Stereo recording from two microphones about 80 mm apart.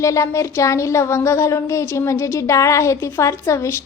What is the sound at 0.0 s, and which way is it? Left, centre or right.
A woman's voice, left.